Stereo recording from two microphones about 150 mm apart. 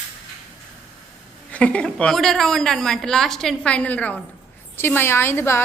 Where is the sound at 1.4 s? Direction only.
10° left (ahead or behind).